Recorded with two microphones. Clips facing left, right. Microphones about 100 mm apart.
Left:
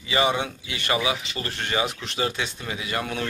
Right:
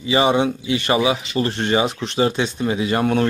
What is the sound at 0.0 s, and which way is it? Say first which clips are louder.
Speech: right 7 dB; 25° right (ahead or behind).